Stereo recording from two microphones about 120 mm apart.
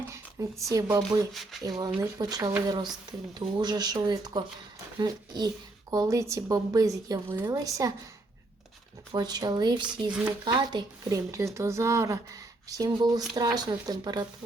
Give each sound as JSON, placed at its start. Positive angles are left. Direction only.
{"t": 0.0, "sound": "speech", "side_deg": -25}
{"t": 1.3, "sound": "a sound", "side_deg": 0}
{"t": 1.8, "sound": "speech", "side_deg": -35}
{"t": 7.3, "sound": "speech", "side_deg": -20}
{"t": 7.5, "sound": "speech", "side_deg": -30}
{"t": 9.1, "sound": "speech", "side_deg": -35}
{"t": 10.1, "sound": "speech", "side_deg": -10}
{"t": 10.4, "sound": "speech", "side_deg": -40}